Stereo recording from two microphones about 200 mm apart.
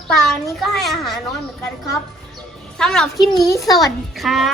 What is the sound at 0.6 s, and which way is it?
Speech, centre (ahead or behind).